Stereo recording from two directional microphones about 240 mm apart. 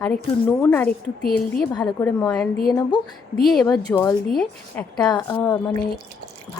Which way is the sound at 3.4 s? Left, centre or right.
Centre.